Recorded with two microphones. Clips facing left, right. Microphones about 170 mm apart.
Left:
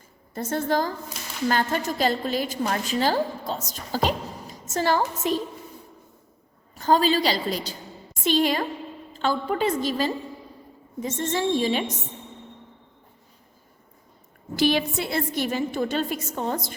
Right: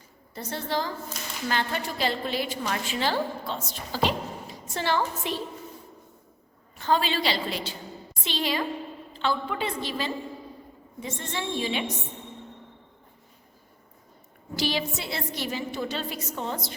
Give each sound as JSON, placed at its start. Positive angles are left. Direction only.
{"t": 0.3, "sound": "a woman's voice", "side_deg": 50}
{"t": 6.7, "sound": "a woman's voice", "side_deg": 40}
{"t": 14.5, "sound": "a woman's voice", "side_deg": 55}